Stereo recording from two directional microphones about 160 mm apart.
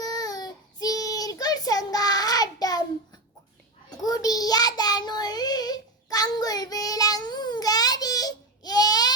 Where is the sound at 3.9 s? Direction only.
25° left (ahead or behind).